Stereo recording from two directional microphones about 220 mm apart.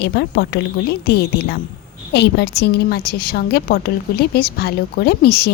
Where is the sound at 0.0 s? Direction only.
45° left (ahead or behind).